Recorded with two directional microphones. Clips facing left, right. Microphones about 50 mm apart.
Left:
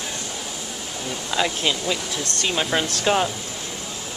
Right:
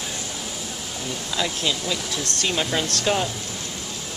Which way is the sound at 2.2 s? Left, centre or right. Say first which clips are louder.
Left 1 dB; centre.